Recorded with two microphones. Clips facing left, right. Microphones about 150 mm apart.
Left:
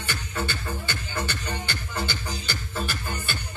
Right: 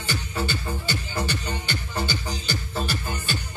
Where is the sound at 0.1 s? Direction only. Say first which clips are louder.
Right 3 dB; 15° right (ahead or behind).